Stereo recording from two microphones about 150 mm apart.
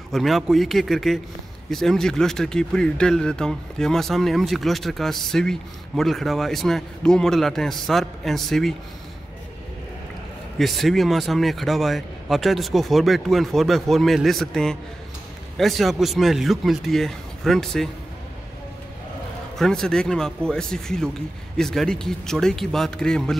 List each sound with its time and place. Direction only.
0.1 s speech: centre (ahead or behind)
10.6 s speech: centre (ahead or behind)
19.6 s speech: 5° left (ahead or behind)